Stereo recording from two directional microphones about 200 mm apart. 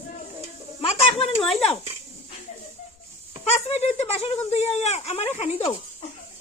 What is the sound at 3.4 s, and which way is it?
Speech, 30° left (ahead or behind).